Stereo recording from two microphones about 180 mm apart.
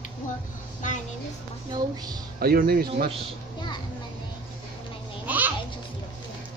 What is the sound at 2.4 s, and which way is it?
Speech, 60° right (ahead or behind).